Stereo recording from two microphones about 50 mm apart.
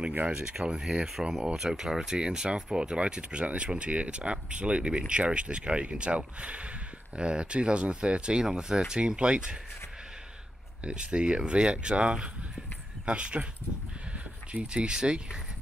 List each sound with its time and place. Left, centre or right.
0.3 s speech: centre
10.8 s speech: right